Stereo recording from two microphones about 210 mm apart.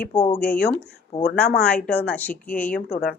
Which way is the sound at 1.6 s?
5° left (ahead or behind).